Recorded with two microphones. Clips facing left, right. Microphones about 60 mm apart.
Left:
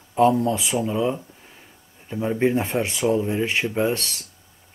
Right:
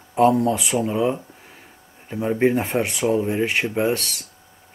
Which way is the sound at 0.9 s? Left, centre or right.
Centre.